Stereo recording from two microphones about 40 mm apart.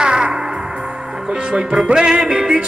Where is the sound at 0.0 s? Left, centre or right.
Right.